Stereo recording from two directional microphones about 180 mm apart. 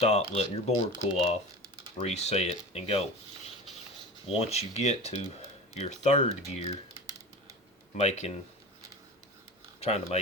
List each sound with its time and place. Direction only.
0.0 s speech: 35° left (ahead or behind)
4.3 s speech: 35° left (ahead or behind)
9.8 s speech: 35° left (ahead or behind)